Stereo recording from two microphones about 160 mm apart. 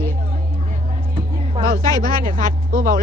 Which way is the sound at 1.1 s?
35° right (ahead or behind).